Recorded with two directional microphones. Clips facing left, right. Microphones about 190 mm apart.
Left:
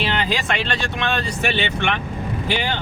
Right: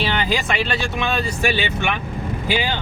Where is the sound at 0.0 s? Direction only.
5° right (ahead or behind).